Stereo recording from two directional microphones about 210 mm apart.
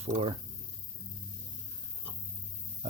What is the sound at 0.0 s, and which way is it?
Speech, 30° right (ahead or behind).